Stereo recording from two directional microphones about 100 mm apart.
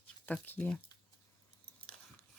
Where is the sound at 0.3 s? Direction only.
20° left (ahead or behind).